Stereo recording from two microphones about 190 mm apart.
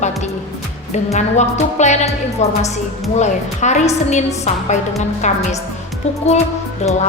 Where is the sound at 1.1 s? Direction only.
35° left (ahead or behind).